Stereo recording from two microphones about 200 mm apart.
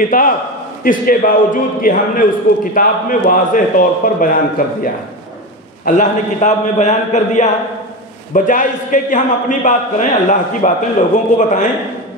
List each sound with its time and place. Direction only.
0.1 s a man's voice: 45° left (ahead or behind)